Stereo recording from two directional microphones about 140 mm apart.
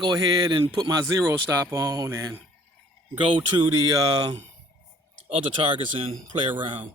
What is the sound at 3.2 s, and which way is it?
Speech, 40° right (ahead or behind).